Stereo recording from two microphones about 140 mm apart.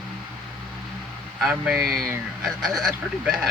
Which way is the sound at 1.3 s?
5° right (ahead or behind).